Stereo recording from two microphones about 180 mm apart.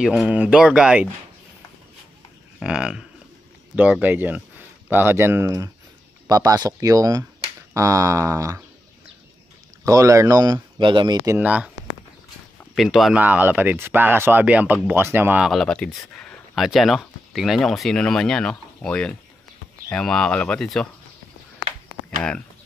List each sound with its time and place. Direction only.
0.0 s speech: centre (ahead or behind)
2.6 s speech: 5° right (ahead or behind)
9.8 s speech: 15° right (ahead or behind)
12.7 s speech: centre (ahead or behind)